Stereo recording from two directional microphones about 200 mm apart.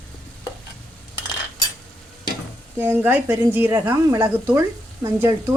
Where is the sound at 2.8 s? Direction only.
10° right (ahead or behind).